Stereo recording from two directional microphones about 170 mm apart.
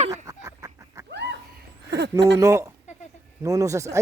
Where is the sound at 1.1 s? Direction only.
90° right.